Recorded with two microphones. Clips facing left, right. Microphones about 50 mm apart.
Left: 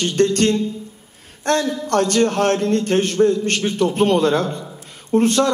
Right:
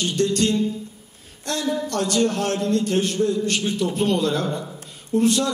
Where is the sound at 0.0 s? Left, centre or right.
Left.